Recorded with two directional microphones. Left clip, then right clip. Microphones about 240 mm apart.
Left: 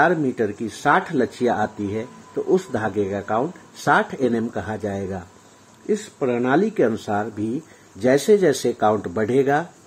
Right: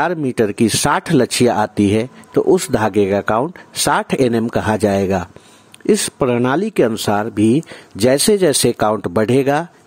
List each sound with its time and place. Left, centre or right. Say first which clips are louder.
0.0 s speech: right 2 dB; right